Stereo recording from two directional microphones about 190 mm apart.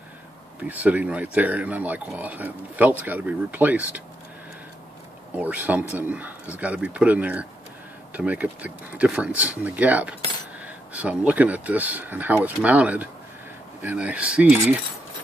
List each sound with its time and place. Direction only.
0.6 s speech: 10° right (ahead or behind)
5.3 s speech: 10° right (ahead or behind)